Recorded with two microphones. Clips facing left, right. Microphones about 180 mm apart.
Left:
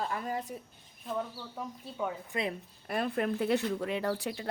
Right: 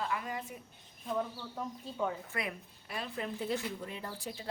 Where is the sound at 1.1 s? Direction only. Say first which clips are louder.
Even; centre (ahead or behind).